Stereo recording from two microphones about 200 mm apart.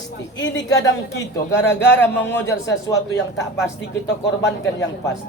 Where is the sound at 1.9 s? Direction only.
10° left (ahead or behind).